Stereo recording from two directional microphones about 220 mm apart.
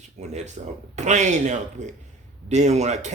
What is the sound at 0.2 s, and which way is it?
Speech, 30° right (ahead or behind).